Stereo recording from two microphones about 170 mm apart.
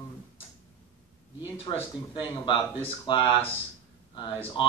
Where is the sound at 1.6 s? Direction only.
30° left (ahead or behind).